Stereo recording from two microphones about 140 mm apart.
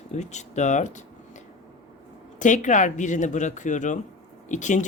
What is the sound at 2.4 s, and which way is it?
Speech, 65° left (ahead or behind).